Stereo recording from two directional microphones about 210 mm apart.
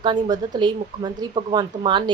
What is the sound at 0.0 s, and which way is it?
A woman's voice, 20° right (ahead or behind).